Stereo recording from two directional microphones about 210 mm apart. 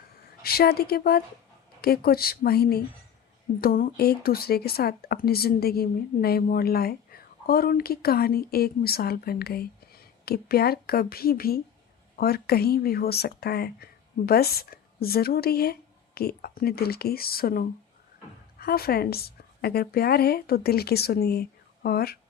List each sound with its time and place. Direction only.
0.4 s speech: 45° left (ahead or behind)